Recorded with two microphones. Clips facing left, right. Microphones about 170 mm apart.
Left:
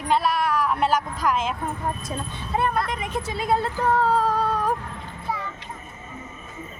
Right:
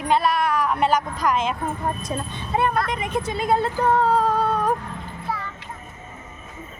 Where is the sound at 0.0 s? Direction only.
Centre (ahead or behind).